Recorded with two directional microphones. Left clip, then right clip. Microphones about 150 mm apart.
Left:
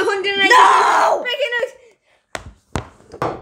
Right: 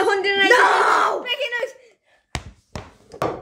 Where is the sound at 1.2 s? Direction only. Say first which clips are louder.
Left 4 dB; centre (ahead or behind).